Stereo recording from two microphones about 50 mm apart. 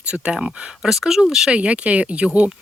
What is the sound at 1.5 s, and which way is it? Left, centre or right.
Speech, right.